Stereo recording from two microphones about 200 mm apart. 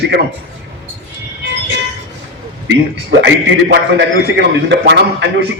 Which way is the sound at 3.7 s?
60° right (ahead or behind).